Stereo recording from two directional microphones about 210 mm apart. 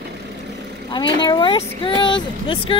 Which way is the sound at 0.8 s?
20° left (ahead or behind).